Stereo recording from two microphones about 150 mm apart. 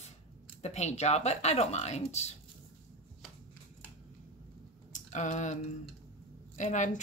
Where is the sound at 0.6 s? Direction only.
45° left (ahead or behind).